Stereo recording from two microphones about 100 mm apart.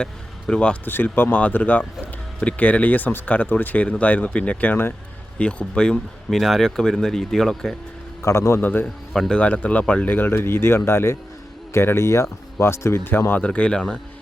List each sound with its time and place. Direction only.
0.0 s vehicle: 10° left (ahead or behind)
0.9 s speech: 20° left (ahead or behind); by 7.8 s centre (ahead or behind)
8.2 s speech: 30° left (ahead or behind)
9.1 s speech: 5° left (ahead or behind)
9.4 s speech: 15° left (ahead or behind)